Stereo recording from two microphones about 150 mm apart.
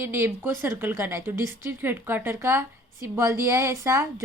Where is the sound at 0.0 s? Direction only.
15° right (ahead or behind).